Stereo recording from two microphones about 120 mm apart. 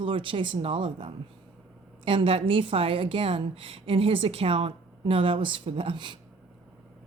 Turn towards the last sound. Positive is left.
turn(degrees=-40)  # may be behind; listen again after turning